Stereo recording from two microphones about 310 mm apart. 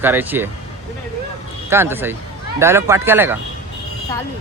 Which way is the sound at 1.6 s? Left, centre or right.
Centre.